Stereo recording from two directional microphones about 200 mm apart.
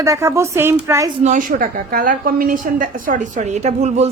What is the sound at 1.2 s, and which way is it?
A woman's voice, 40° right (ahead or behind).